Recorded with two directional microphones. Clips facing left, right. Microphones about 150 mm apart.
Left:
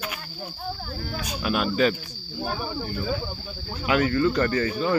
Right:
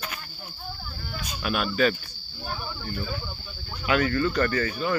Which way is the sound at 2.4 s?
90° left.